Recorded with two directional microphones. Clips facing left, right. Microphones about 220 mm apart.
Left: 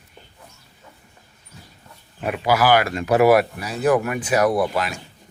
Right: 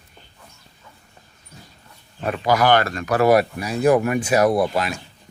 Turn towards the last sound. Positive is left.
turn(degrees=-25)  # may be behind; listen again after turning